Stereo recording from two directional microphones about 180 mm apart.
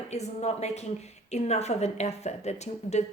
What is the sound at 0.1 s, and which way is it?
A woman's voice, 40° left (ahead or behind).